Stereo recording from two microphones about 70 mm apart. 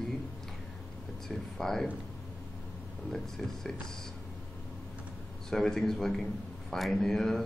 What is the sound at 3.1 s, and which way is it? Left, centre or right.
Speech, centre.